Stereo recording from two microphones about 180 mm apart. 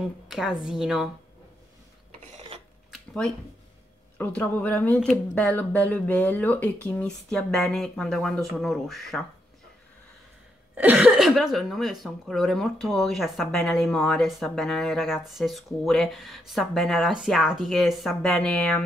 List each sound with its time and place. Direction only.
0.3 s speech: centre (ahead or behind)
2.3 s rub: 35° right (ahead or behind)
2.9 s a sound: 5° left (ahead or behind)
4.2 s speech: 10° left (ahead or behind)
10.7 s speech: 5° right (ahead or behind)